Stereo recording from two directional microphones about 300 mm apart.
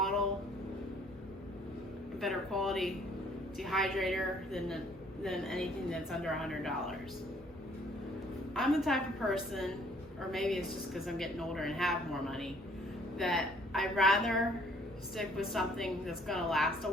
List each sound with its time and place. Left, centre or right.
2.2 s speech: centre
8.5 s speech: centre